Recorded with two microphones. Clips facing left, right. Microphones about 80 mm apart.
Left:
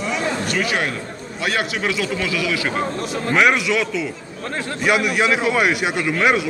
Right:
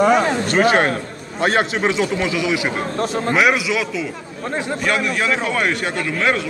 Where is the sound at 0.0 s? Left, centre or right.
Right.